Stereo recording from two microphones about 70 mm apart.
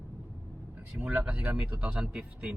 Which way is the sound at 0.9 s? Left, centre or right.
Right.